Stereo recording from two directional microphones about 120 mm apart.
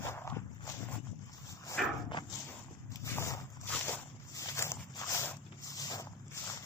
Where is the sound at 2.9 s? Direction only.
25° left (ahead or behind).